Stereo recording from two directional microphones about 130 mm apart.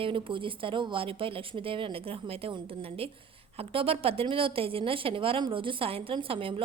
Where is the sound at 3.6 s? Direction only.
45° right (ahead or behind).